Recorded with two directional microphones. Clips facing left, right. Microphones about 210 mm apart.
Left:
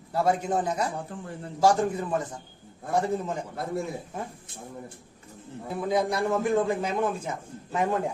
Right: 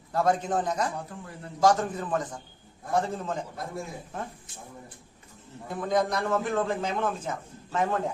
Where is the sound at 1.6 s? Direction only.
10° left (ahead or behind).